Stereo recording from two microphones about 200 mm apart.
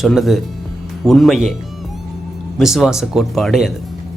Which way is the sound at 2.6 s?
Centre (ahead or behind).